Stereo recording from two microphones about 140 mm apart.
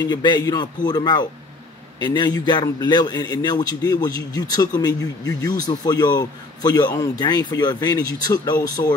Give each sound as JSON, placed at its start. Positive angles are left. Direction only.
{"t": 0.0, "sound": "a man's voice", "side_deg": 30}